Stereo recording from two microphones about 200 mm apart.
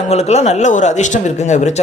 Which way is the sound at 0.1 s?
30° left (ahead or behind).